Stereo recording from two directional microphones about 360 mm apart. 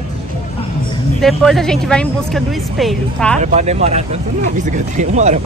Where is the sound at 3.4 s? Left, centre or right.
Centre.